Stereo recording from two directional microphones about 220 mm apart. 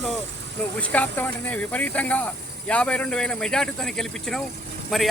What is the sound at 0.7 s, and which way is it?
Speech, 5° left (ahead or behind).